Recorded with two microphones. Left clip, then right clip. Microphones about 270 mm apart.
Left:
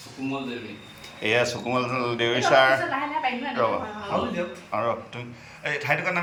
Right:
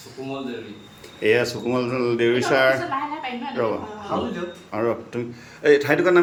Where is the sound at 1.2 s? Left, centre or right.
Centre.